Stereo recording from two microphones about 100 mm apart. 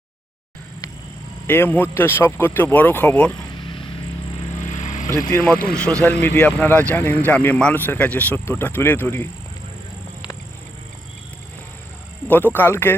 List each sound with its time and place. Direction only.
1.5 s speech: 20° left (ahead or behind)
3.7 s a sound: 55° left (ahead or behind)
5.0 s speech: 30° left (ahead or behind)
5.5 s speech: 10° left (ahead or behind)
12.3 s speech: 20° left (ahead or behind)